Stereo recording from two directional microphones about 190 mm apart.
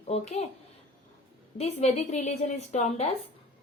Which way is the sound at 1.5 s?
35° left (ahead or behind).